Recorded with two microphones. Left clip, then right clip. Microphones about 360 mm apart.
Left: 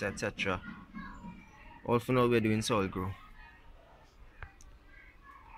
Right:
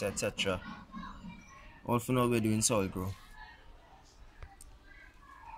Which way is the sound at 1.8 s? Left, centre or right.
Centre.